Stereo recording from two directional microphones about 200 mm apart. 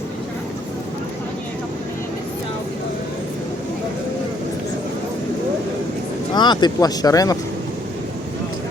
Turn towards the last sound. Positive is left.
turn(degrees=20)  # may be behind; listen again after turning